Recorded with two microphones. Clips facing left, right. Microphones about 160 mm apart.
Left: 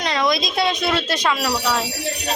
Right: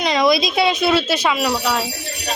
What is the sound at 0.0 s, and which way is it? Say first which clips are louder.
Speech: right 4 dB; 10° right (ahead or behind).